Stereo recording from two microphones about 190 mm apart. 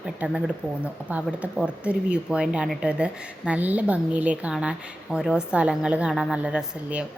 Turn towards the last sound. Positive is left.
turn(degrees=-5)  # may be behind; listen again after turning